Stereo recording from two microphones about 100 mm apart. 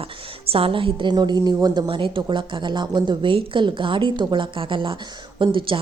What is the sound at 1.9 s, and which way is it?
Speech, 60° right (ahead or behind).